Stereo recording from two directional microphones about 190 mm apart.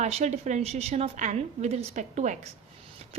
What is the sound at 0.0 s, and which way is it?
A woman's voice, 35° right (ahead or behind).